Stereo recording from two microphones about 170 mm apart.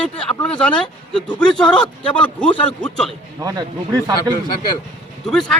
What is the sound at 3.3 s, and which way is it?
Speech, 20° right (ahead or behind).